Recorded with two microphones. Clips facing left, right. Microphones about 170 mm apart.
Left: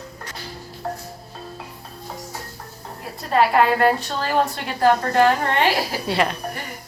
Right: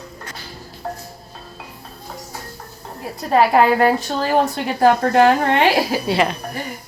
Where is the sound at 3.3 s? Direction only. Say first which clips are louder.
Right 3 dB; 45° right (ahead or behind).